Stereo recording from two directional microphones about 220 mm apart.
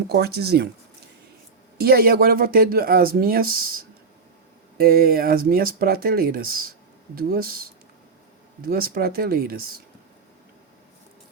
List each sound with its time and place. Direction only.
0.1 s speech: 45° right (ahead or behind)
1.8 s speech: 45° right (ahead or behind)
4.8 s speech: 45° right (ahead or behind)